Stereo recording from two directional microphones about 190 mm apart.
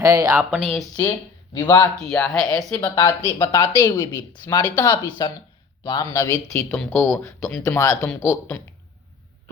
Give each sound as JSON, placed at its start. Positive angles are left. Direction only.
{"t": 0.0, "sound": "speech", "side_deg": -20}
{"t": 0.6, "sound": "a woman's voice", "side_deg": 5}
{"t": 1.5, "sound": "speech", "side_deg": 15}
{"t": 2.1, "sound": "a woman's voice", "side_deg": 5}
{"t": 2.6, "sound": "a woman's voice", "side_deg": 20}